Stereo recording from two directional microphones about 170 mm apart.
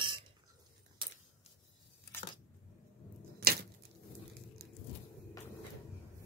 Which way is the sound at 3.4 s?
65° right (ahead or behind).